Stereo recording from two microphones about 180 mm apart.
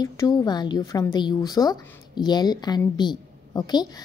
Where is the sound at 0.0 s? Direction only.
20° left (ahead or behind).